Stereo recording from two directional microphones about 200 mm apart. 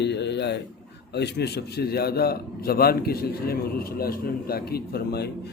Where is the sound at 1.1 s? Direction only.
55° left (ahead or behind).